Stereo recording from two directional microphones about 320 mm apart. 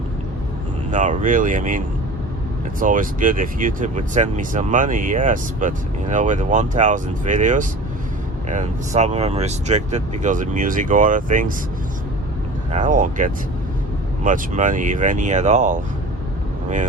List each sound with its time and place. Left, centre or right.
0.9 s speech: right
2.8 s speech: right
12.7 s speech: right